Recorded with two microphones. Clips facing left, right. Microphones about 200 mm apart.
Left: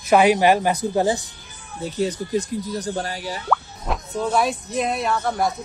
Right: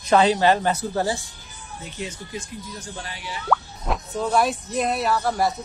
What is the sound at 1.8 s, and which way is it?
Speech, 35° left (ahead or behind).